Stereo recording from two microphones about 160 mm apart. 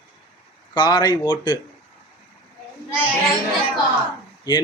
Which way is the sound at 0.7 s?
25° left (ahead or behind).